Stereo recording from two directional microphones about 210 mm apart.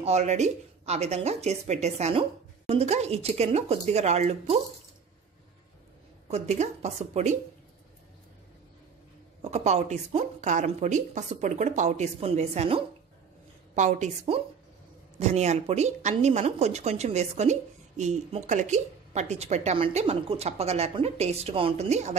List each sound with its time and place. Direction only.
0.0 s speech: 30° right (ahead or behind)
6.2 s speech: 30° right (ahead or behind)
9.4 s speech: 30° right (ahead or behind)